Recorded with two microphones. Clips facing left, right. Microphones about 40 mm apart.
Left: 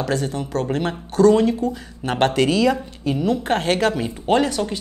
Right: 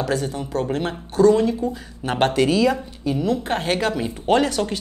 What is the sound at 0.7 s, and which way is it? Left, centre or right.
Speech, left.